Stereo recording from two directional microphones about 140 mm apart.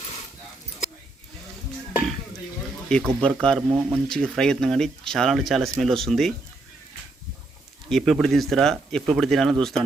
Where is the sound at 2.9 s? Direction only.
5° left (ahead or behind).